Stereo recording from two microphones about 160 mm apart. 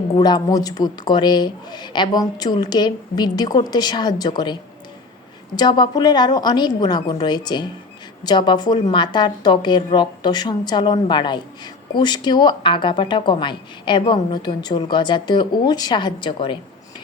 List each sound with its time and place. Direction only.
0.2 s speech: 25° left (ahead or behind)
5.5 s speech: 30° left (ahead or behind)